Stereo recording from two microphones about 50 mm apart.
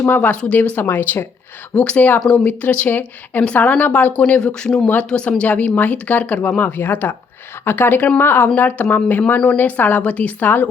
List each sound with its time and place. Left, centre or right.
0.1 s speech: left
0.8 s speech: left
1.7 s speech: left
4.1 s speech: centre